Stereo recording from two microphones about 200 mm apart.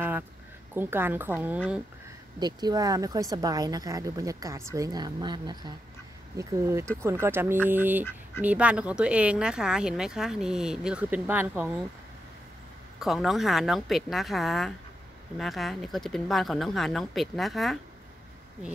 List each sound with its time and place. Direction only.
0.7 s speech: 10° right (ahead or behind)
2.4 s speech: 20° right (ahead or behind)
13.0 s speech: centre (ahead or behind)